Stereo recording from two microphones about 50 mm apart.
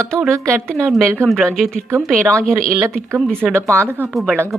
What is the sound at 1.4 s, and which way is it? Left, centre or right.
Speech, centre.